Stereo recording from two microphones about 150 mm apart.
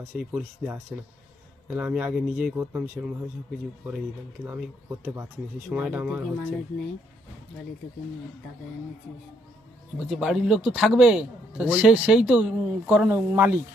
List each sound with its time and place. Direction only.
0.1 s a man's voice: 5° right (ahead or behind)
5.0 s a man's voice: 15° right (ahead or behind)
10.1 s a man's voice: 5° right (ahead or behind)